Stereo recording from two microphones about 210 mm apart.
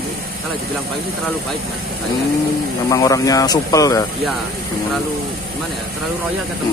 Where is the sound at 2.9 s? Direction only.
15° left (ahead or behind).